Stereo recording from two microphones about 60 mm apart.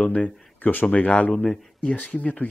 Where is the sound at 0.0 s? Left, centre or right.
Left.